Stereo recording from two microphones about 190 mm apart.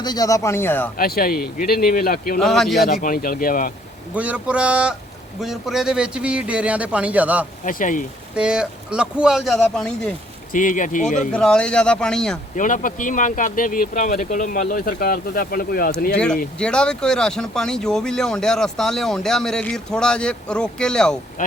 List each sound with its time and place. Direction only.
0.0 s speech: 20° left (ahead or behind)
0.9 s speech: 50° left (ahead or behind)
2.4 s speech: centre (ahead or behind)
2.8 s speech: 50° left (ahead or behind)
4.1 s speech: 5° right (ahead or behind)
7.6 s speech: 45° left (ahead or behind)
8.4 s speech: 5° right (ahead or behind)
10.5 s speech: 45° left (ahead or behind)
11.3 s speech: 5° left (ahead or behind)
12.5 s speech: 45° left (ahead or behind)
16.1 s speech: 5° left (ahead or behind)